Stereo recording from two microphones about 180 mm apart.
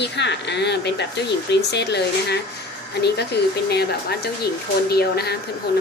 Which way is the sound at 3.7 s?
65° left (ahead or behind).